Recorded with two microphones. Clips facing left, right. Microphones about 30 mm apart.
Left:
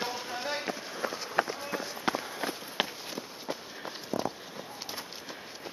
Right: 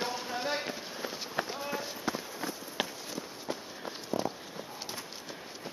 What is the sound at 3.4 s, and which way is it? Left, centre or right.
Walk, centre.